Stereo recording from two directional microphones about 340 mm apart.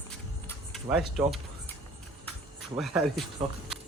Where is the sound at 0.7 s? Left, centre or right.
Centre.